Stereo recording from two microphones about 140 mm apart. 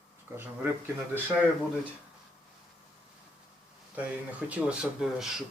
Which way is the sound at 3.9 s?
10° right (ahead or behind).